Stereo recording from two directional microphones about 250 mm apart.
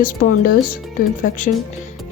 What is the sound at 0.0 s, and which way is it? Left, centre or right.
A woman's voice, left.